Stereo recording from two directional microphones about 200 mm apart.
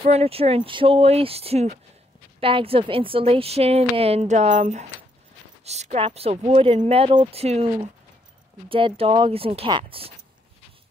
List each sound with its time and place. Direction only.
0.0 s a woman's voice: 30° right (ahead or behind)